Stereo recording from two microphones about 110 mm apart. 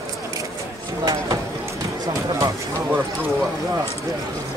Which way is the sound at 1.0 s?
35° right (ahead or behind).